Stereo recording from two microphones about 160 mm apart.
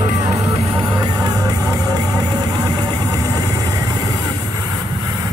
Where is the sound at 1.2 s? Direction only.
20° right (ahead or behind).